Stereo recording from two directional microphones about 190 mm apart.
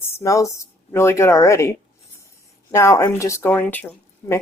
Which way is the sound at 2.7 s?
15° left (ahead or behind).